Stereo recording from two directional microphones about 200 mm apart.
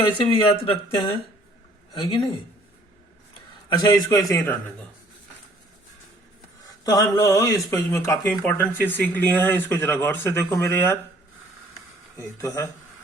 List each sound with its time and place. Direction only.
0.2 s speech: 25° left (ahead or behind)
3.7 s speech: 20° left (ahead or behind)
6.8 s speech: 20° left (ahead or behind)
12.1 s speech: 15° left (ahead or behind)